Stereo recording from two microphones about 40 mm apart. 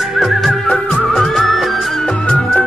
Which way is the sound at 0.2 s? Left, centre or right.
Centre.